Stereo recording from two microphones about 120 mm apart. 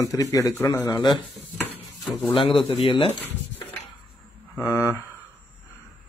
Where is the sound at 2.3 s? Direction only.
50° left (ahead or behind).